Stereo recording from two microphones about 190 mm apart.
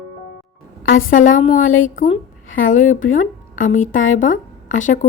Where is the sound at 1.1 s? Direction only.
40° left (ahead or behind).